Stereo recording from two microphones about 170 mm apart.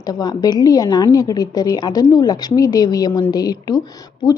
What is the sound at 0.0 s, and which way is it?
A woman's voice, 20° left (ahead or behind).